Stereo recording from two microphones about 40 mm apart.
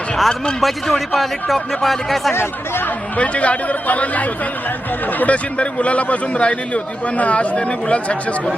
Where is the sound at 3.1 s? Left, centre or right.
Left.